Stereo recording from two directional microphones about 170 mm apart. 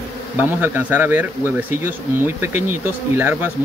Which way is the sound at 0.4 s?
10° right (ahead or behind).